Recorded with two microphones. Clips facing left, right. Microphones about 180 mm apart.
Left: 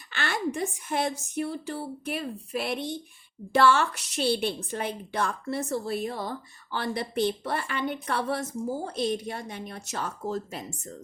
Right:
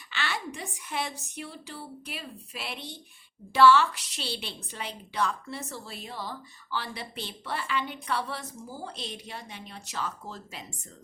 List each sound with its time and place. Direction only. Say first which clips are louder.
0.1 s a woman's voice: left 5 dB; 50° left (ahead or behind)